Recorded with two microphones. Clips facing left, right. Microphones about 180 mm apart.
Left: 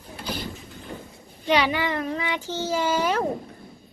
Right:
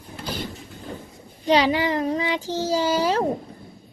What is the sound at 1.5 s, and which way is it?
A child's voice, 35° right (ahead or behind).